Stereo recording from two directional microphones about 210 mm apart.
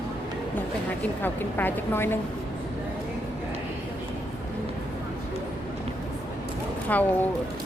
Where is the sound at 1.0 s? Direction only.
10° left (ahead or behind).